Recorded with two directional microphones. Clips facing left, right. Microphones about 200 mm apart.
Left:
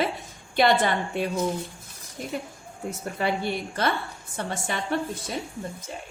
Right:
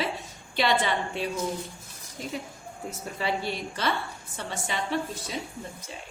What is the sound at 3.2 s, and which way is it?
A woman's voice, 55° left (ahead or behind).